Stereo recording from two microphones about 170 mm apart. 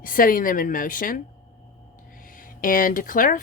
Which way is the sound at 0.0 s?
55° left (ahead or behind).